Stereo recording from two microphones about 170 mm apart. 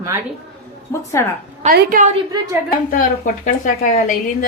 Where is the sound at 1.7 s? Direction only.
60° right (ahead or behind).